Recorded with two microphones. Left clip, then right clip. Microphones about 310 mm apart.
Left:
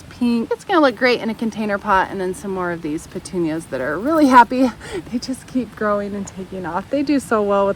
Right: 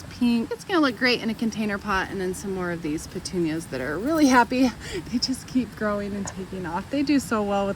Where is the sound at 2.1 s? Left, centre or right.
Left.